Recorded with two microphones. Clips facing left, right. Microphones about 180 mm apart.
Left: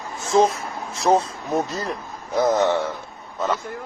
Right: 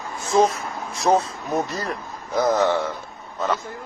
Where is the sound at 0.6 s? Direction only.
30° left (ahead or behind).